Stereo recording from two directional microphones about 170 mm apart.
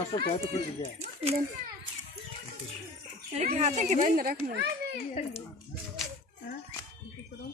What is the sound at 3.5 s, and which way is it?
Speech, 45° right (ahead or behind).